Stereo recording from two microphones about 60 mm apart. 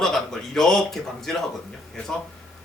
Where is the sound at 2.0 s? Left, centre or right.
Centre.